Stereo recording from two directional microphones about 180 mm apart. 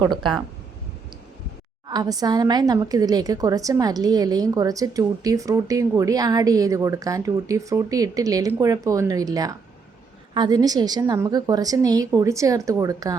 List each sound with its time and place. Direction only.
0.0 s a woman's voice: 25° right (ahead or behind)
1.9 s a woman's voice: 20° right (ahead or behind)